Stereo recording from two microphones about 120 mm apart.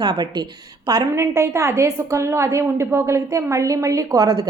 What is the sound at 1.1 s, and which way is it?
A woman's voice, 25° right (ahead or behind).